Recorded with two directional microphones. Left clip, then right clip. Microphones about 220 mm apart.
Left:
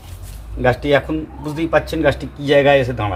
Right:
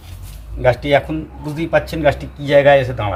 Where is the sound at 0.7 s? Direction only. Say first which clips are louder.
Right 1 dB; 15° left (ahead or behind).